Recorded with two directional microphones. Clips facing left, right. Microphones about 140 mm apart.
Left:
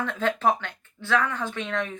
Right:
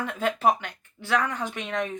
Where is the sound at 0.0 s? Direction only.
10° right (ahead or behind).